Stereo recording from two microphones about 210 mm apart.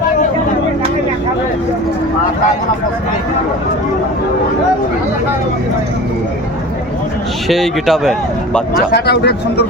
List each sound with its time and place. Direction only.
7.4 s a man's voice: centre (ahead or behind)
8.9 s speech: 50° left (ahead or behind)